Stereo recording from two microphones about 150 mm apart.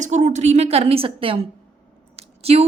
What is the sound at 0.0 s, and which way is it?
Speech, 55° right (ahead or behind).